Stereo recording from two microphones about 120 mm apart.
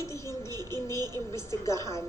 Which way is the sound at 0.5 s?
30° right (ahead or behind).